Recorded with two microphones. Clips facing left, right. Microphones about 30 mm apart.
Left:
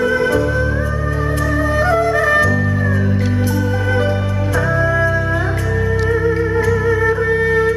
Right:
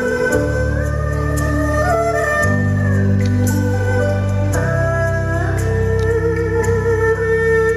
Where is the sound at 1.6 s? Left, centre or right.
Left.